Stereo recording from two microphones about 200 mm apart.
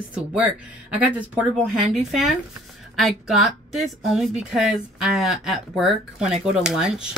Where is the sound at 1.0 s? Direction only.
5° right (ahead or behind).